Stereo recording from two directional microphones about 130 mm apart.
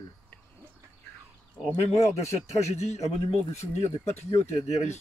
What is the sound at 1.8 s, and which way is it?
A man's voice, 55° left (ahead or behind).